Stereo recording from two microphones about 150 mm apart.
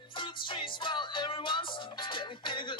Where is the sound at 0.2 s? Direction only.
35° left (ahead or behind).